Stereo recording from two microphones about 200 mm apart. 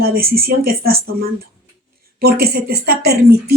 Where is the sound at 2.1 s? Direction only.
50° right (ahead or behind).